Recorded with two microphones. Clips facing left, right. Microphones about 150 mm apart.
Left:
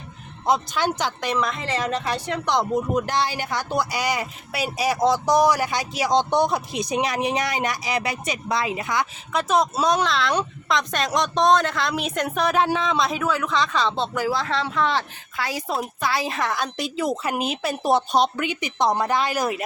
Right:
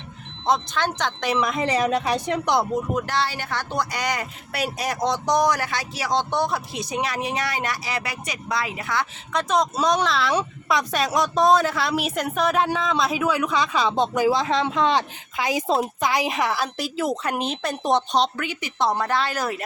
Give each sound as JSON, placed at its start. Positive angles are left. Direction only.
{"t": 0.4, "sound": "speech", "side_deg": 10}
{"t": 1.3, "sound": "a woman's voice", "side_deg": -10}
{"t": 2.9, "sound": "speech", "side_deg": 15}
{"t": 9.3, "sound": "speech", "side_deg": 5}